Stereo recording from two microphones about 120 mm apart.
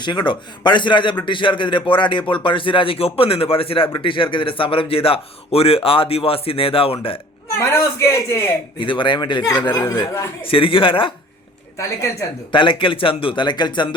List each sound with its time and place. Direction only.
0.0 s a man's voice: 40° left (ahead or behind)
7.6 s a man's voice: 25° left (ahead or behind)
8.8 s speech: 45° left (ahead or behind)
9.7 s a man's voice: 20° left (ahead or behind)
10.4 s a man's voice: 50° left (ahead or behind)
12.5 s a man's voice: 45° left (ahead or behind)